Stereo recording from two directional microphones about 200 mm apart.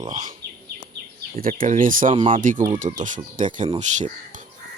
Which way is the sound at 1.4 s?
40° right (ahead or behind).